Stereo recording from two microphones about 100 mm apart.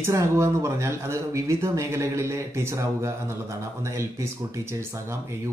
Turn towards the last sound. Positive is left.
turn(degrees=-30)  # may be behind; listen again after turning